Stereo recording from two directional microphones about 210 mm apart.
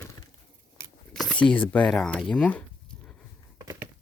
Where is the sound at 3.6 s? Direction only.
15° right (ahead or behind).